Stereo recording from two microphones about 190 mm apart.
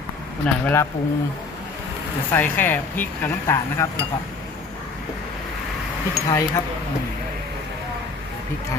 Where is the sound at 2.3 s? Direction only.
10° left (ahead or behind).